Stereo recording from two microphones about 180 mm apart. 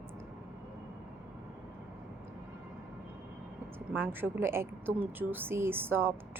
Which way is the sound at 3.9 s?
10° right (ahead or behind).